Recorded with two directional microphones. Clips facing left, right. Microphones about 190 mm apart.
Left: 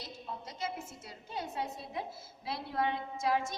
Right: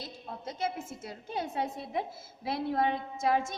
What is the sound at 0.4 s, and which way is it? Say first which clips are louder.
A woman's voice: right 7 dB; 50° right (ahead or behind).